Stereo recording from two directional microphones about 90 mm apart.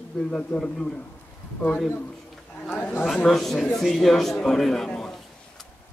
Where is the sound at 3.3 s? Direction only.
5° left (ahead or behind).